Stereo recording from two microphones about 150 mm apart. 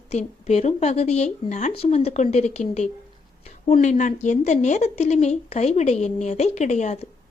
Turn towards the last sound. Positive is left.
turn(degrees=50)  # may be behind; listen again after turning